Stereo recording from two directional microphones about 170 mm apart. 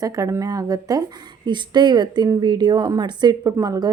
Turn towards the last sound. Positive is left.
turn(degrees=-20)  # may be behind; listen again after turning